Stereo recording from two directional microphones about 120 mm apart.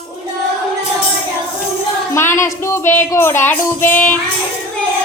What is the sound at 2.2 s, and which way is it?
Speech, 25° left (ahead or behind).